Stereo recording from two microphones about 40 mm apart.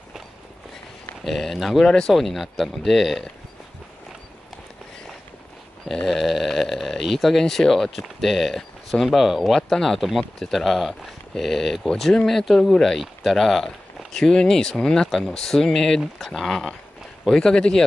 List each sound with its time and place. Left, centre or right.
1.2 s speech: centre
1.9 s speech: centre
2.1 s speech: centre
6.0 s speech: centre
9.0 s speech: centre